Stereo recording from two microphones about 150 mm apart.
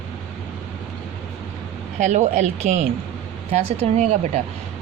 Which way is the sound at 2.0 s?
50° right (ahead or behind).